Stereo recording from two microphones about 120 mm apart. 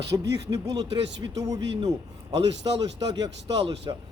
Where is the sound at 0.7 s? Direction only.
40° right (ahead or behind).